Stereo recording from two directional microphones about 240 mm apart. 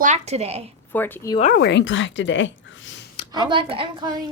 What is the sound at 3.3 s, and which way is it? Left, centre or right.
Speech, centre.